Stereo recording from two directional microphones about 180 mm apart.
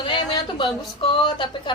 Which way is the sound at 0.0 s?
25° left (ahead or behind).